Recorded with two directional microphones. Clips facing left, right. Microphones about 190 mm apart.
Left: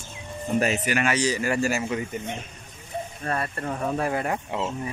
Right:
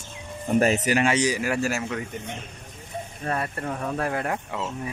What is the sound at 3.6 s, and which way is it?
Speech, 5° left (ahead or behind).